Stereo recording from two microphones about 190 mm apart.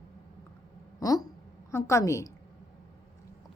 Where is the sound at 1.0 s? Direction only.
20° left (ahead or behind).